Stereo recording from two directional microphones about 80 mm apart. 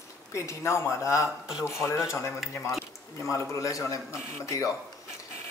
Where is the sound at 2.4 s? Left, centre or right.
Centre.